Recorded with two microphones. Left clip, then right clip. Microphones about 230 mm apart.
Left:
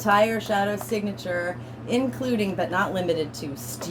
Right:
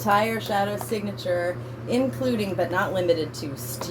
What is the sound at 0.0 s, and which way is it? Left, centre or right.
A woman's voice, left.